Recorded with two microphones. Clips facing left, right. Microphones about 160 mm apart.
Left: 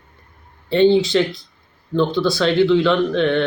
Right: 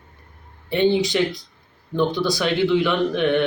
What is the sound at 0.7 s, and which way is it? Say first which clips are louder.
A man's voice: left 5 dB; 15° right (ahead or behind).